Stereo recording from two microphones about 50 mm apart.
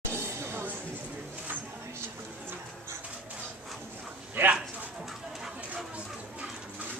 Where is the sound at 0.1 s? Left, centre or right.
Right.